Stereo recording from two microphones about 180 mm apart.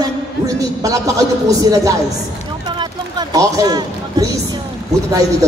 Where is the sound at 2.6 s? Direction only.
25° right (ahead or behind).